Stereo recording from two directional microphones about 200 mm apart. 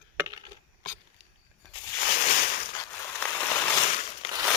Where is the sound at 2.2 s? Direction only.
40° left (ahead or behind).